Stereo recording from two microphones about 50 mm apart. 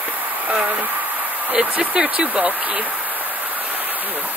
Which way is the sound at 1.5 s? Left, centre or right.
Right.